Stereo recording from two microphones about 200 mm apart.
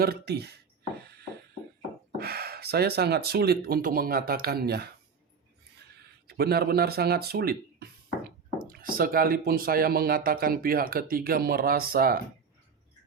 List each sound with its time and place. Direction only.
0.0 s speech: 55° right (ahead or behind)
2.1 s speech: 50° right (ahead or behind)
6.2 s speech: 50° right (ahead or behind)